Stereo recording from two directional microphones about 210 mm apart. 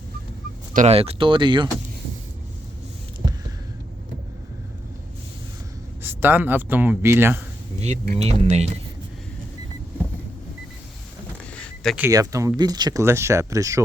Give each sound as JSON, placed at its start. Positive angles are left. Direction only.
{"t": 0.7, "sound": "speech", "side_deg": -35}
{"t": 6.0, "sound": "speech", "side_deg": -10}
{"t": 8.1, "sound": "speech", "side_deg": -30}
{"t": 11.5, "sound": "a sound", "side_deg": 5}
{"t": 12.0, "sound": "speech", "side_deg": -15}